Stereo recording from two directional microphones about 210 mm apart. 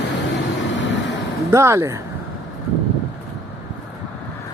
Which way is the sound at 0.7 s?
60° left (ahead or behind).